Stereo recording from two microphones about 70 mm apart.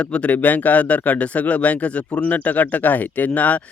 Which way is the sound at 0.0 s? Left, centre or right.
Centre.